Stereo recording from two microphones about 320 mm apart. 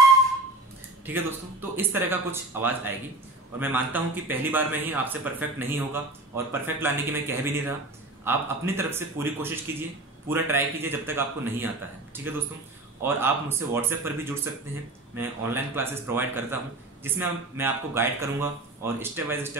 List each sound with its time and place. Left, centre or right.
1.0 s a man's voice: centre